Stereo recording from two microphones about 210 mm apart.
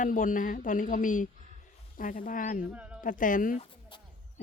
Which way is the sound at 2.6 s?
5° right (ahead or behind).